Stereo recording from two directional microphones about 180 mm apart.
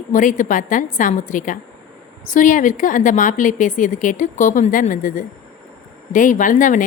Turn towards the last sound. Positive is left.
turn(degrees=45)  # may be behind; listen again after turning